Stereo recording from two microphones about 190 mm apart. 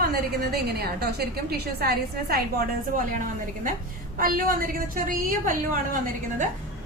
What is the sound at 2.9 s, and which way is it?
A woman's voice, 45° right (ahead or behind).